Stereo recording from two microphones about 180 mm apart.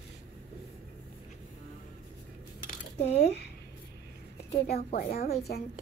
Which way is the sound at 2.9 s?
40° left (ahead or behind).